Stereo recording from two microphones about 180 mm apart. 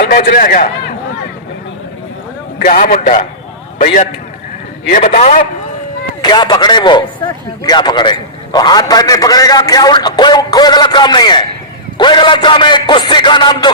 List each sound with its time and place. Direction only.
0.0 s a man's voice: 60° left (ahead or behind)
2.6 s a man's voice: 50° left (ahead or behind)
4.9 s a man's voice: 45° left (ahead or behind)
6.2 s a man's voice: 25° left (ahead or behind)